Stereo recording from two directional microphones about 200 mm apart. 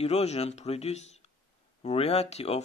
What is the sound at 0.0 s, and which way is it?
Speech, 30° left (ahead or behind).